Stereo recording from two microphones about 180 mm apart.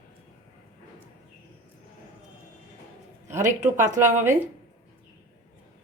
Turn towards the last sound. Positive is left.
turn(degrees=-45)  # may be behind; listen again after turning